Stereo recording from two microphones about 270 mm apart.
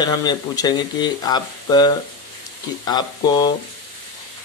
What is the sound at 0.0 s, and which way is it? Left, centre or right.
Speech, centre.